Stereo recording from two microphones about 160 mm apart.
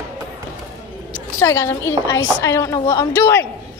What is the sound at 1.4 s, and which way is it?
A woman's voice, 15° left (ahead or behind).